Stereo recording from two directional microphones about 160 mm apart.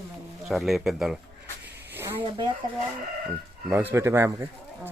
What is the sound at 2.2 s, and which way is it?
Speech, 35° right (ahead or behind).